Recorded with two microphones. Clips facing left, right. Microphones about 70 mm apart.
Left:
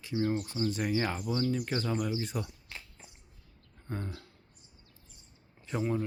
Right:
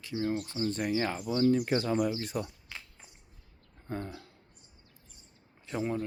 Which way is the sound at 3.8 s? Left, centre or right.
Centre.